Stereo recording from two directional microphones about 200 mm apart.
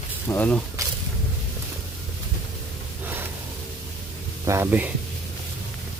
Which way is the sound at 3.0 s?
10° right (ahead or behind).